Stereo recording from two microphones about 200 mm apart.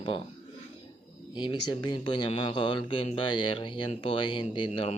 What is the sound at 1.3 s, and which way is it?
Speech, 25° left (ahead or behind).